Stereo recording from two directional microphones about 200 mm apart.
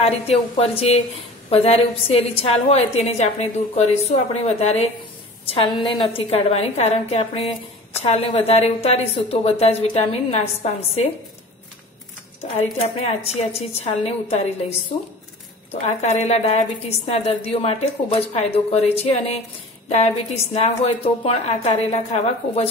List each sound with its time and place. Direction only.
0.3 s a woman's voice: 30° left (ahead or behind)
12.8 s a woman's voice: 30° left (ahead or behind)
15.7 s a woman's voice: 30° left (ahead or behind)
20.5 s a woman's voice: 30° left (ahead or behind)